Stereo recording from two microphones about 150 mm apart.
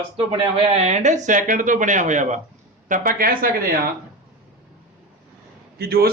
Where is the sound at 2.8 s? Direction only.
65° right (ahead or behind).